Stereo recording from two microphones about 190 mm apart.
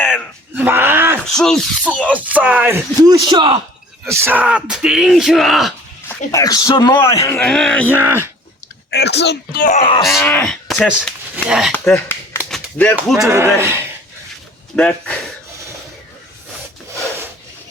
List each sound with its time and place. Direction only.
0.0 s wail: 10° left (ahead or behind)
0.5 s groan: 10° right (ahead or behind)
1.3 s speech: 5° left (ahead or behind); by 3.6 s 25° right (ahead or behind)
4.1 s speech: 10° right (ahead or behind)
6.1 s a man's voice: 15° left (ahead or behind)
7.9 s speech: 10° right (ahead or behind)
8.9 s speech: 65° left (ahead or behind)
9.7 s speech: 30° left (ahead or behind)
10.1 s speech: 5° left (ahead or behind)
11.7 s speech: 10° left (ahead or behind)
12.5 s a sound: 5° left (ahead or behind)
13.1 s speech: 15° right (ahead or behind)
14.8 s a man's voice: 5° left (ahead or behind)